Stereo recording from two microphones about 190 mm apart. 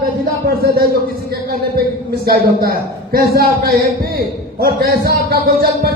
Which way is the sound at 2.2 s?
50° right (ahead or behind).